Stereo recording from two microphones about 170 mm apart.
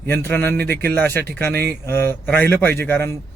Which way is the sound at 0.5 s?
70° right (ahead or behind).